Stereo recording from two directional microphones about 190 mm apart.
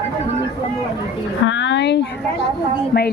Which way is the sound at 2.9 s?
55° left (ahead or behind).